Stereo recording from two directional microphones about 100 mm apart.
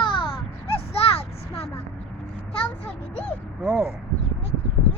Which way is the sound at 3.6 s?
20° right (ahead or behind).